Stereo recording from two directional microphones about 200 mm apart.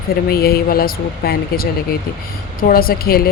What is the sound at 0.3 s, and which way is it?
A woman's voice, 50° left (ahead or behind).